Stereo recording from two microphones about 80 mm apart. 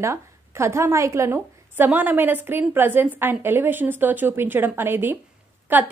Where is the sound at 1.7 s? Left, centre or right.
Right.